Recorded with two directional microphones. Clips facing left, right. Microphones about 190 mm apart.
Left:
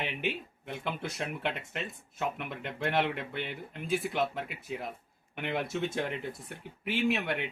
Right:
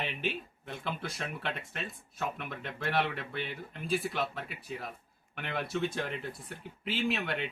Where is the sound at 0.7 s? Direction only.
15° left (ahead or behind).